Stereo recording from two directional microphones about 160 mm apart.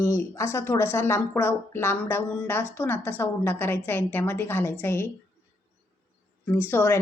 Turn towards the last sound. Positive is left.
turn(degrees=15)  # may be behind; listen again after turning